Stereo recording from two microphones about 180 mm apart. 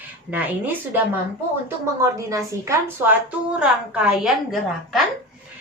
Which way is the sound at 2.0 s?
15° right (ahead or behind).